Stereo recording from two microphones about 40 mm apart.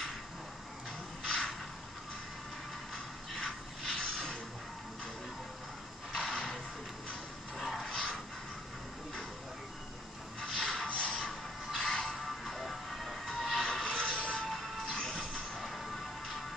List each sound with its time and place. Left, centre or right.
1.2 s a sound: left
3.3 s a sound: left
6.1 s a sound: left
7.8 s vehicle: left
10.4 s music: centre
10.9 s music: left
12.2 s music: centre
13.3 s vehicle: centre
13.7 s music: left
14.5 s music: centre
15.0 s train: left
15.5 s music: centre